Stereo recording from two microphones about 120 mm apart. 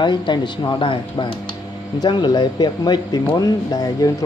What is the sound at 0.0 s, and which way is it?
Speech, 40° left (ahead or behind).